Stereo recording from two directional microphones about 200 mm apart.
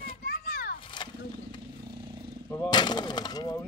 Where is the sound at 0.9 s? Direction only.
20° left (ahead or behind).